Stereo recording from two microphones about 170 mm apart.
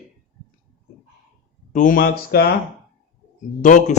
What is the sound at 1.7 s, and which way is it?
Speech, 50° left (ahead or behind).